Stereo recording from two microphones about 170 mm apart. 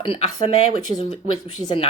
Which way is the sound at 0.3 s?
50° right (ahead or behind).